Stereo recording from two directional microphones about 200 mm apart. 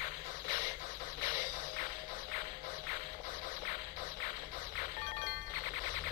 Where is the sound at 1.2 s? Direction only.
45° left (ahead or behind).